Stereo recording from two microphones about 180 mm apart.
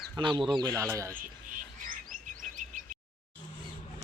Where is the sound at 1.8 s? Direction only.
50° right (ahead or behind).